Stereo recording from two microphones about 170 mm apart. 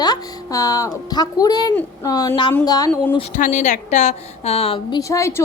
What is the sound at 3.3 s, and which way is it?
A woman's voice, 45° left (ahead or behind).